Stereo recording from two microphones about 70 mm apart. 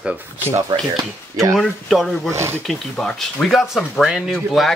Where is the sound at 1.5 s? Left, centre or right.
Centre.